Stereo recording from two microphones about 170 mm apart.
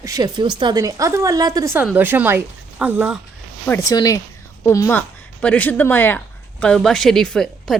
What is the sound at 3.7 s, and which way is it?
Speech, 20° left (ahead or behind).